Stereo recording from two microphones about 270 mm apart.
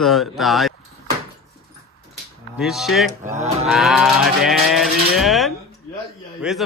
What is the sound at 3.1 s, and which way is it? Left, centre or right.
Livestock, right.